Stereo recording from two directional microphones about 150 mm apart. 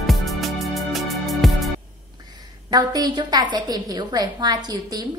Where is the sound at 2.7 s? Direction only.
25° right (ahead or behind).